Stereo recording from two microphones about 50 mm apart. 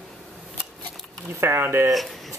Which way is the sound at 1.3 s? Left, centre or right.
Right.